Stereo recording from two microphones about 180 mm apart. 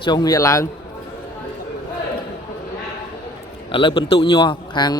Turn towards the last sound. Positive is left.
turn(degrees=25)  # may be behind; listen again after turning